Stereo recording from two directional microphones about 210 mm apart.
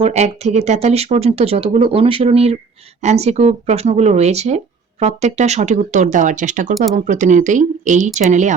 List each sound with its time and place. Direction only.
0.0 s speech: 30° right (ahead or behind)